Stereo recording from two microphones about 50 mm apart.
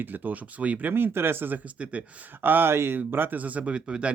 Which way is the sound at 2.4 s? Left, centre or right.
Right.